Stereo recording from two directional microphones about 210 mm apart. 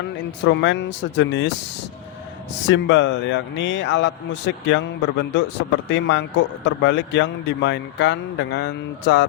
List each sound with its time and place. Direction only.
0.3 s a man's voice: 60° left (ahead or behind)
2.6 s a man's voice: 60° left (ahead or behind)